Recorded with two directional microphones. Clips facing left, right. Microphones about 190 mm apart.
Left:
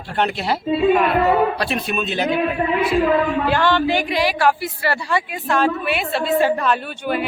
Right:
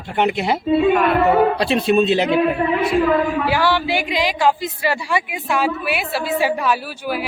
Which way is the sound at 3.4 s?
10° right (ahead or behind).